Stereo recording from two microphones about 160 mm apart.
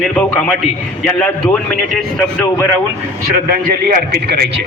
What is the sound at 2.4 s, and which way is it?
Speech, 20° left (ahead or behind).